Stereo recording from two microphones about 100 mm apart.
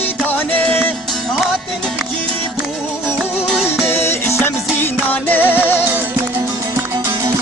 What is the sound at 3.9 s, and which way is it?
Music, 25° left (ahead or behind).